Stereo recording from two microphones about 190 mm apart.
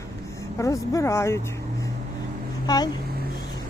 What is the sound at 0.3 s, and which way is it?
Speech, 15° left (ahead or behind).